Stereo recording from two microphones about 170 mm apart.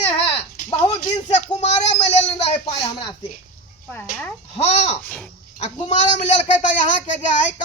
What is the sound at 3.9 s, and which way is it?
Speech, 5° left (ahead or behind).